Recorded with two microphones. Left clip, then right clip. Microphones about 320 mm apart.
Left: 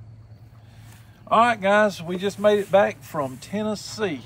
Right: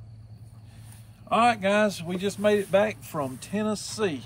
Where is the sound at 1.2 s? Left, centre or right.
Centre.